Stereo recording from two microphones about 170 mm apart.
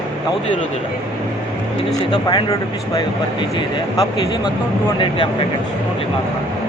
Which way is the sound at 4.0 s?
25° left (ahead or behind).